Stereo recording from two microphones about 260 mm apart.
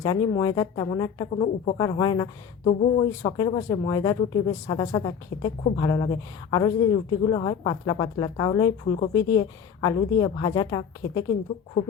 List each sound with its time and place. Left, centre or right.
0.0 s speech: centre